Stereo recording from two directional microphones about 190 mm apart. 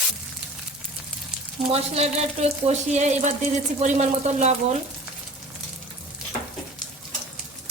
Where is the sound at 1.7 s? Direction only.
35° right (ahead or behind).